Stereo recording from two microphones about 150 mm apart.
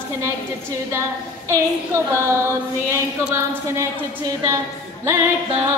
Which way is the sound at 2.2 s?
20° right (ahead or behind).